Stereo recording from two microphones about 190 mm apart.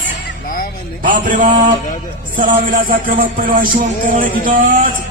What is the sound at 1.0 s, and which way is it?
A man's voice, 45° right (ahead or behind).